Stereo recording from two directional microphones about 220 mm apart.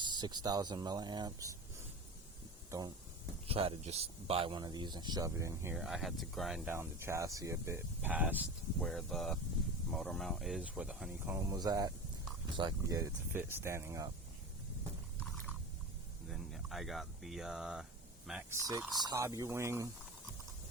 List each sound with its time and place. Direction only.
0.0 s a sound: 20° right (ahead or behind)
0.4 s speech: 20° right (ahead or behind)
2.6 s speech: 15° right (ahead or behind)
5.7 s speech: centre (ahead or behind)
16.3 s speech: centre (ahead or behind)
18.6 s speech: 15° right (ahead or behind)